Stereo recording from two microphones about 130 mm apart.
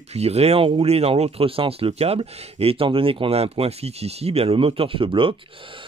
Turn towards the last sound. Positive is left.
turn(degrees=-45)  # may be behind; listen again after turning